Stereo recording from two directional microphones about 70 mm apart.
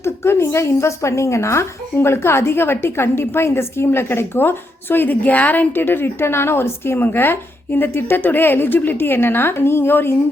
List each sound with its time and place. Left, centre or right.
0.0 s a woman's voice: left